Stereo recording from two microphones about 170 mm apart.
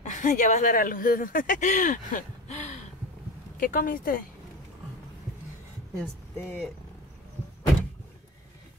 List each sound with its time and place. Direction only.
0.0 s speech: 45° left (ahead or behind)
3.5 s speech: 55° left (ahead or behind)
5.9 s speech: 10° left (ahead or behind)